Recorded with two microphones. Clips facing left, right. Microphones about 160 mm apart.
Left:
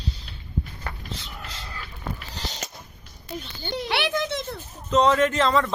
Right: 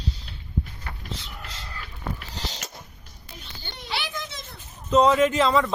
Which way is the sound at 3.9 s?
60° left (ahead or behind).